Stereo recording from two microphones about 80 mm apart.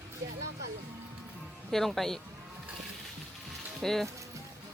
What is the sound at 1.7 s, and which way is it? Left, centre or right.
Speech, centre.